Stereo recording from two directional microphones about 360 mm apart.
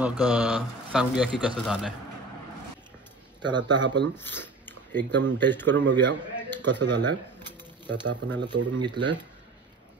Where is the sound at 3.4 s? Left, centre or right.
Centre.